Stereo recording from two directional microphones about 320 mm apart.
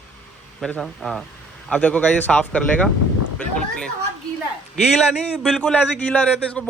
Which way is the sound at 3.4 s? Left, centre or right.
Centre.